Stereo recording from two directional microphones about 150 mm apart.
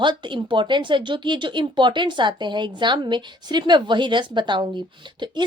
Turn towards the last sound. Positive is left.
turn(degrees=-30)  # may be behind; listen again after turning